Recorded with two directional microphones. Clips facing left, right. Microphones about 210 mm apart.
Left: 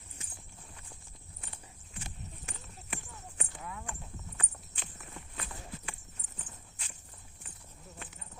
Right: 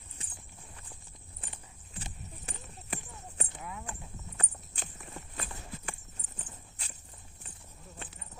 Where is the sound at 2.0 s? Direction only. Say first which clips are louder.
Right 1 dB; 35° right (ahead or behind).